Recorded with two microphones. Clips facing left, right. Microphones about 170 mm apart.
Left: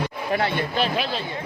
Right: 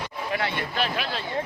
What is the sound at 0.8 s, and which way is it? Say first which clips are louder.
Speech: left 3 dB; 25° left (ahead or behind).